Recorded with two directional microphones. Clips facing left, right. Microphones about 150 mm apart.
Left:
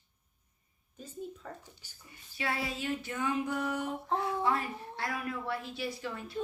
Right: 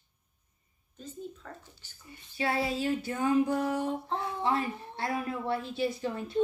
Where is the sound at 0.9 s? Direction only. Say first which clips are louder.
Even; 10° left (ahead or behind).